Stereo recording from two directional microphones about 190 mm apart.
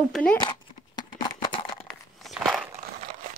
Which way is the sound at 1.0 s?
25° left (ahead or behind).